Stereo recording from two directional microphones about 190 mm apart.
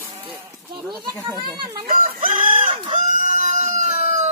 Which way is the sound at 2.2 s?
45° right (ahead or behind).